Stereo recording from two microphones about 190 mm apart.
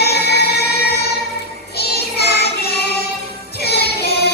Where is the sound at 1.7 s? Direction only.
55° left (ahead or behind).